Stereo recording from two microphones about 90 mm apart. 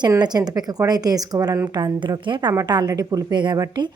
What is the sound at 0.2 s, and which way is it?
A woman's voice, 50° right (ahead or behind).